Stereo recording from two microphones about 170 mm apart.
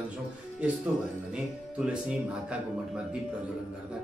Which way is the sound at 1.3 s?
5° right (ahead or behind).